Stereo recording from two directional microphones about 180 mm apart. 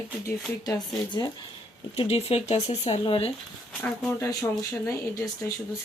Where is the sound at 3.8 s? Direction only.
5° left (ahead or behind).